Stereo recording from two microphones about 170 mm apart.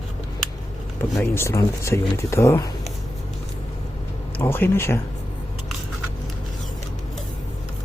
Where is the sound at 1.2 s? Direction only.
15° left (ahead or behind).